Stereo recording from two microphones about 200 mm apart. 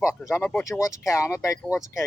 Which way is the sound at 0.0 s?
15° left (ahead or behind).